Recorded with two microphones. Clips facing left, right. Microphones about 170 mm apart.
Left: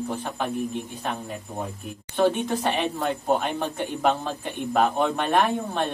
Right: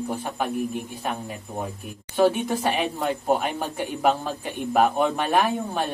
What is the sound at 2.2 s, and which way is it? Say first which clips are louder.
Speech: right 2 dB; 10° right (ahead or behind).